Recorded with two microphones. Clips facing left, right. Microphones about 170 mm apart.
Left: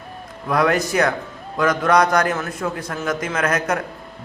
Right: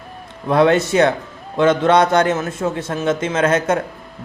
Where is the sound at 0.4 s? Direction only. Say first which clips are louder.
Right 5 dB; 25° right (ahead or behind).